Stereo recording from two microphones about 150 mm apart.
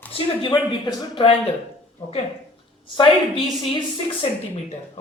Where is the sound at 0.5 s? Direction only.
25° left (ahead or behind).